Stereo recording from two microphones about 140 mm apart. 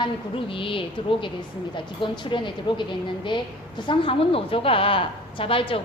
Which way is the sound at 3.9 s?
40° left (ahead or behind).